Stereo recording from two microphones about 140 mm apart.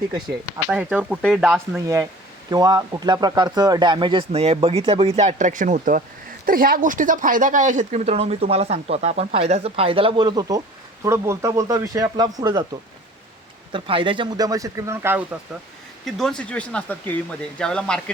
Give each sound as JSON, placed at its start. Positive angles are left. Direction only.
{"t": 0.7, "sound": "speech", "side_deg": -10}
{"t": 1.4, "sound": "speech", "side_deg": 0}
{"t": 1.7, "sound": "speech", "side_deg": -20}
{"t": 6.4, "sound": "speech", "side_deg": -90}
{"t": 13.7, "sound": "speech", "side_deg": -40}
{"t": 16.0, "sound": "speech", "side_deg": 0}